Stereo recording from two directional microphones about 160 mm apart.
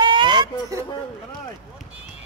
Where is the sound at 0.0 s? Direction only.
30° right (ahead or behind).